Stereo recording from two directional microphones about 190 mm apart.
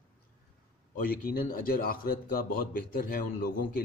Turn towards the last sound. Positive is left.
turn(degrees=50)  # may be behind; listen again after turning